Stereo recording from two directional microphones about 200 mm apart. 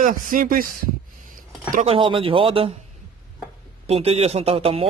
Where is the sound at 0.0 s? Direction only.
45° right (ahead or behind).